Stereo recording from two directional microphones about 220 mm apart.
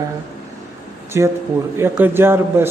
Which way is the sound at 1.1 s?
10° right (ahead or behind).